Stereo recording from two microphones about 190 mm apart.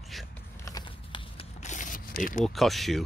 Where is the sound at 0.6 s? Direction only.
25° left (ahead or behind).